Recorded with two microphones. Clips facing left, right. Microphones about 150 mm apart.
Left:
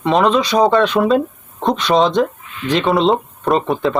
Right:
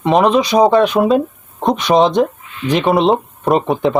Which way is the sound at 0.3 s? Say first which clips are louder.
Right 2 dB; 15° right (ahead or behind).